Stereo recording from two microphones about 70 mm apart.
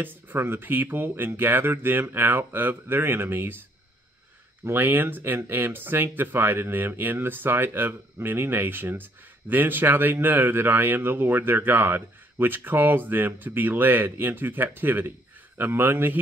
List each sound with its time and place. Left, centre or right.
0.0 s speech: right
4.6 s a man's voice: right